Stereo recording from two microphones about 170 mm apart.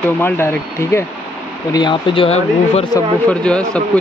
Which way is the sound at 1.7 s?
25° left (ahead or behind).